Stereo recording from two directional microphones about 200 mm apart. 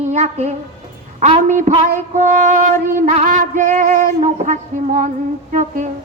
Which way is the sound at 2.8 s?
40° right (ahead or behind).